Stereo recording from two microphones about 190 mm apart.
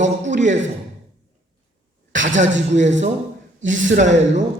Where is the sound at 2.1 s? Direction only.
80° right.